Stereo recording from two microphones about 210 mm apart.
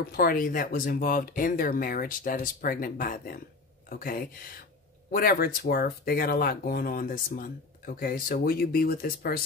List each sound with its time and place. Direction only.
0.0 s speech: 45° left (ahead or behind)